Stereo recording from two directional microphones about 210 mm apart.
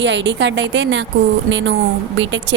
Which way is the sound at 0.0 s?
60° right (ahead or behind).